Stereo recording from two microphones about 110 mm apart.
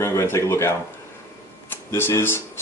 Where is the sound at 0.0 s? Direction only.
25° left (ahead or behind).